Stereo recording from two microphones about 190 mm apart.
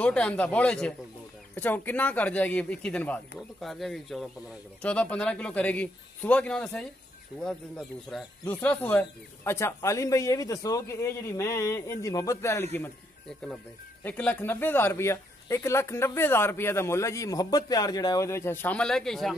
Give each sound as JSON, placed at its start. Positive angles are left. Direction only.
{"t": 0.0, "sound": "speech", "side_deg": 5}
{"t": 14.0, "sound": "speech", "side_deg": 5}